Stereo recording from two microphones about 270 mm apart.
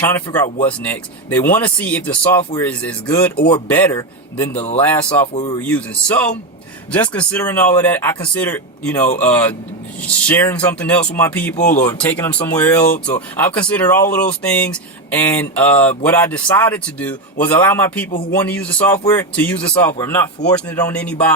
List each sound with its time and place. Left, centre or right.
0.0 s speech: centre
5.3 s speech: left
5.5 s speech: centre
18.1 s speech: left
18.3 s speech: centre